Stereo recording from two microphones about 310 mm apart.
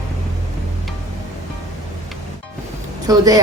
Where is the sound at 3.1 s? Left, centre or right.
Centre.